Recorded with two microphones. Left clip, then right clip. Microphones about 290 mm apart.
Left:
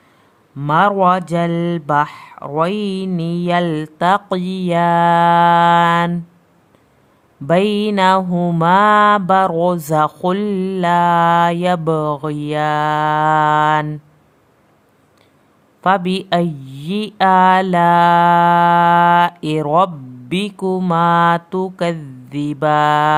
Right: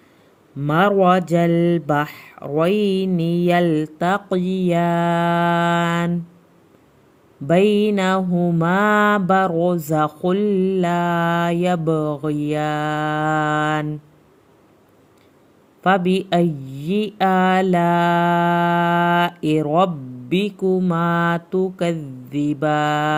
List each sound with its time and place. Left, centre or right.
0.6 s speech: centre
7.4 s mantra: centre
10.2 s speech: centre
15.8 s speech: centre
20.3 s mantra: centre